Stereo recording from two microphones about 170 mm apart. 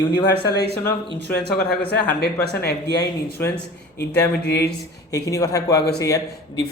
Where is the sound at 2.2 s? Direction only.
70° left (ahead or behind).